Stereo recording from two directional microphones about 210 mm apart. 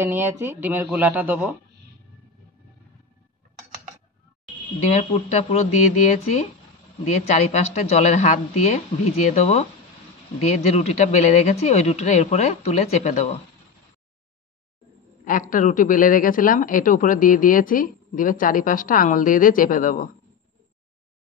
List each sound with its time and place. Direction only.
0.0 s speech: 10° right (ahead or behind)
4.9 s speech: 30° left (ahead or behind)
15.2 s speech: 40° left (ahead or behind)